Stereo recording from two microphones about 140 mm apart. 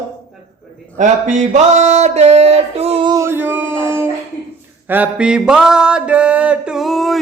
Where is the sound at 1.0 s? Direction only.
60° right (ahead or behind); by 3.0 s 45° right (ahead or behind).